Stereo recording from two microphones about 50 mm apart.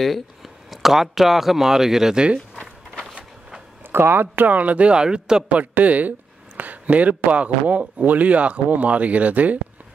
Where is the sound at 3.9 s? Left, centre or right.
Right.